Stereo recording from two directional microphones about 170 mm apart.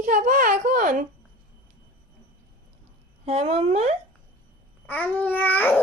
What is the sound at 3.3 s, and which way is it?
Speech, 35° right (ahead or behind).